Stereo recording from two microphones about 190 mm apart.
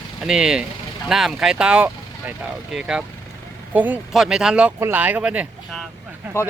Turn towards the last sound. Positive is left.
turn(degrees=15)  # may be behind; listen again after turning